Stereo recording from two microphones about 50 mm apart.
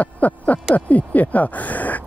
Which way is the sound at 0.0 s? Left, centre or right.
Left.